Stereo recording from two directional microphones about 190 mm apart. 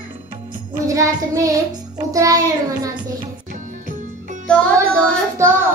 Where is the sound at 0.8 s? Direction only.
15° right (ahead or behind).